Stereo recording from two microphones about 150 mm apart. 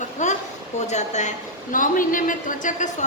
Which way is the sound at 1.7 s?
60° left (ahead or behind).